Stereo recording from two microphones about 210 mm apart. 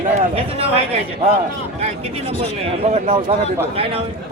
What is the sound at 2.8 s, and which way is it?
Speech, 30° right (ahead or behind).